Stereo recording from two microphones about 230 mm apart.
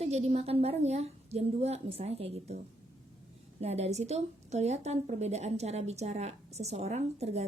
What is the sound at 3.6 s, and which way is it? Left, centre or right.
A woman's voice, right.